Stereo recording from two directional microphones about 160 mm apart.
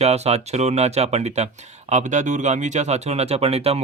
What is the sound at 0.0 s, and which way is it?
Speech, 40° right (ahead or behind).